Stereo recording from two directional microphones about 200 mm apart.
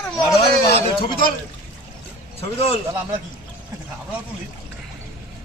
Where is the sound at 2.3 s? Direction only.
30° left (ahead or behind).